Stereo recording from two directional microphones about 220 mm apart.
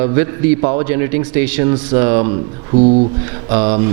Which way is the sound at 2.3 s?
30° right (ahead or behind).